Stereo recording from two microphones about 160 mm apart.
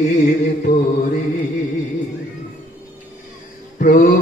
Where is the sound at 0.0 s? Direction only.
50° left (ahead or behind).